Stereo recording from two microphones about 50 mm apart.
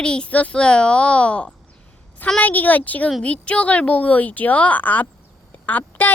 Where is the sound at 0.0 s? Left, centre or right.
Centre.